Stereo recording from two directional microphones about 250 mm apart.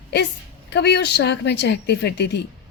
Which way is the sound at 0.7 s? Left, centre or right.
Left.